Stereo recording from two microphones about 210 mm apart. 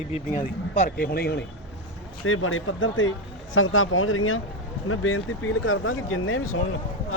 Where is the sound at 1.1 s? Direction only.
50° left (ahead or behind).